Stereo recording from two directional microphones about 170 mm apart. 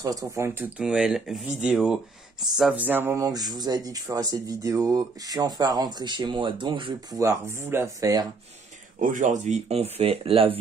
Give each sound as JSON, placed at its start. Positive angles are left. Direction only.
{"t": 0.0, "sound": "speech", "side_deg": -20}
{"t": 0.7, "sound": "speech", "side_deg": -5}
{"t": 9.0, "sound": "speech", "side_deg": -50}